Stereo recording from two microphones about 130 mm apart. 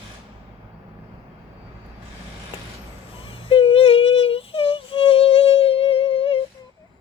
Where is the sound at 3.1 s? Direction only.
45° left (ahead or behind).